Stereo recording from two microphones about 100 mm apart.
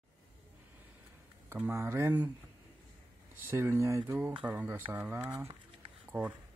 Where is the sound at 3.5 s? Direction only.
25° right (ahead or behind).